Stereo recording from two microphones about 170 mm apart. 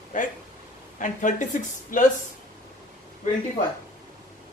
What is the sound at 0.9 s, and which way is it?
A woman's voice, 50° left (ahead or behind).